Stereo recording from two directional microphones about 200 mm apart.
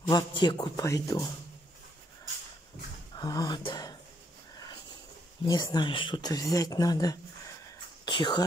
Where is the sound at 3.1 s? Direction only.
20° left (ahead or behind).